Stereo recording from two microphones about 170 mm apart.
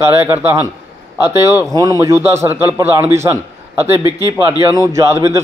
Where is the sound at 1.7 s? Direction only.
20° right (ahead or behind).